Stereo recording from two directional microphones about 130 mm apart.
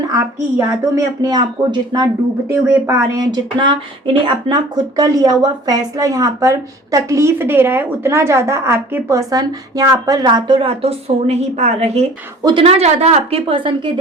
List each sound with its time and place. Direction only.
0.1 s speech: 25° right (ahead or behind); by 12.0 s 55° right (ahead or behind)
12.4 s speech: 35° right (ahead or behind)
12.6 s a woman's voice: 55° right (ahead or behind)